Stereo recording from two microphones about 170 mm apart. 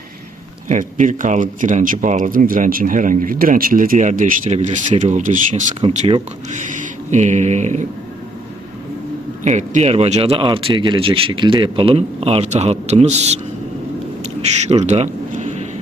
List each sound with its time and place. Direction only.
0.7 s speech: 50° right (ahead or behind)
5.8 s speech: 40° right (ahead or behind)
9.4 s speech: 45° right (ahead or behind)
14.7 s a sound: 40° right (ahead or behind)